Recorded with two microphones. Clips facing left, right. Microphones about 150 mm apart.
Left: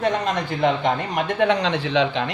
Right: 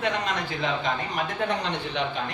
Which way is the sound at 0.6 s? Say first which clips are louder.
Left 9 dB; 65° left (ahead or behind).